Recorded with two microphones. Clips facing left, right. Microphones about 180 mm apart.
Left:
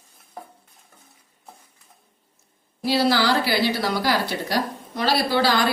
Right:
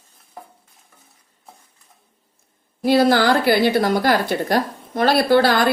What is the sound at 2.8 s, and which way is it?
A woman's voice, 50° right (ahead or behind).